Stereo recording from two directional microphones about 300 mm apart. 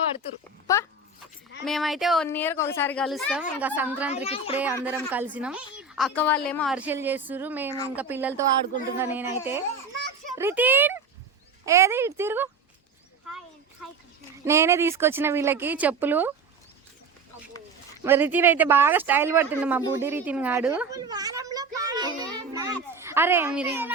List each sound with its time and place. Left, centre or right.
0.7 s speech: centre
1.6 s a woman's voice: centre
4.1 s speech: centre
4.5 s a woman's voice: centre
14.4 s speech: centre
18.0 s speech: centre